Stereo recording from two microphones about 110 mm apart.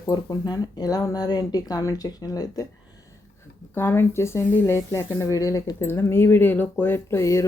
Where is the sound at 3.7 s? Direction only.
20° left (ahead or behind).